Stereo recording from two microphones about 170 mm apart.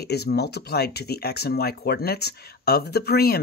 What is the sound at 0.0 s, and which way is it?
Speech, 70° left (ahead or behind).